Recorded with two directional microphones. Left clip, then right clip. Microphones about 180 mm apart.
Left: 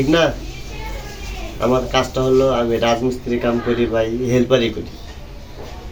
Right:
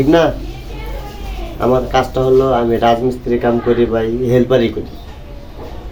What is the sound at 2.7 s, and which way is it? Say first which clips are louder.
Speech: right 4 dB; 20° right (ahead or behind).